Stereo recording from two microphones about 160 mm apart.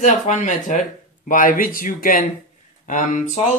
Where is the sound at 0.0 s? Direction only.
50° left (ahead or behind).